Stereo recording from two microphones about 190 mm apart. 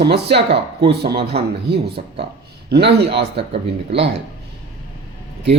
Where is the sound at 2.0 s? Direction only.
40° right (ahead or behind).